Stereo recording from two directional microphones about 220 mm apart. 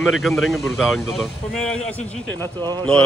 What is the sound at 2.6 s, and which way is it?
Speech, 20° right (ahead or behind).